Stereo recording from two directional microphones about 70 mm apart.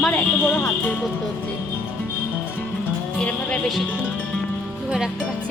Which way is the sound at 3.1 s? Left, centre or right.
Centre.